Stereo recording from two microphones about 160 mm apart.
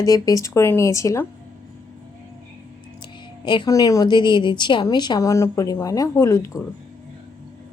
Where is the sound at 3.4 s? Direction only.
30° left (ahead or behind).